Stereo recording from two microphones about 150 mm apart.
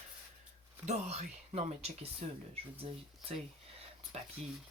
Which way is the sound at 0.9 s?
45° right (ahead or behind).